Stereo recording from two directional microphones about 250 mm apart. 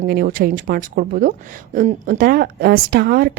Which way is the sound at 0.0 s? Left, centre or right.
Right.